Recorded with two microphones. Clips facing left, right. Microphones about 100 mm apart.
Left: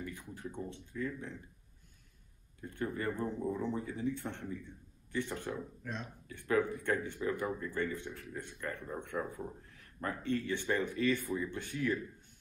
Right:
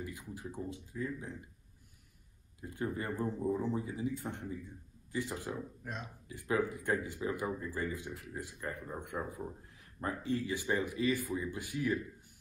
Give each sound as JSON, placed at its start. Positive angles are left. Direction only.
{"t": 0.0, "sound": "a sound", "side_deg": -15}
{"t": 0.9, "sound": "speech", "side_deg": -20}
{"t": 2.6, "sound": "speech", "side_deg": -15}